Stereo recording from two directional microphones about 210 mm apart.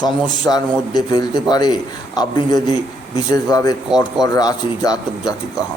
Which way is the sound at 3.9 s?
Centre (ahead or behind).